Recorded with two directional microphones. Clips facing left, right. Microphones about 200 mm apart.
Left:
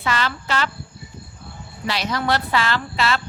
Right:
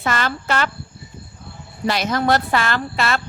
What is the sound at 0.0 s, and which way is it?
Speech, 50° right (ahead or behind).